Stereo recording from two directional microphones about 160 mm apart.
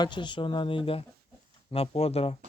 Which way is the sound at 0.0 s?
30° left (ahead or behind).